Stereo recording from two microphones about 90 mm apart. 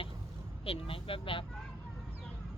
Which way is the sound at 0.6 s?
90° left.